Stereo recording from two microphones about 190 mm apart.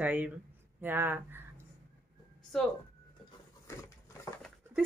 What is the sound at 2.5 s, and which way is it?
Speech, centre (ahead or behind).